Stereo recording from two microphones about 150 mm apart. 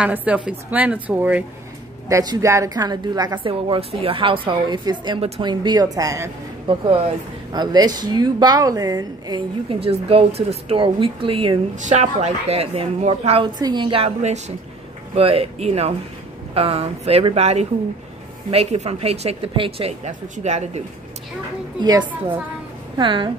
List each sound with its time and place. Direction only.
0.0 s a woman's voice: 10° right (ahead or behind)
6.7 s a woman's voice: 35° right (ahead or behind)
9.7 s speech: 40° right (ahead or behind)
11.8 s speech: 50° right (ahead or behind)
13.6 s speech: 30° right (ahead or behind)
20.1 s speech: 50° right (ahead or behind)
21.8 s a woman's voice: 25° right (ahead or behind)